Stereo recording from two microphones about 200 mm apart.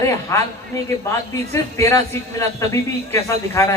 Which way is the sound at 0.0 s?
15° left (ahead or behind).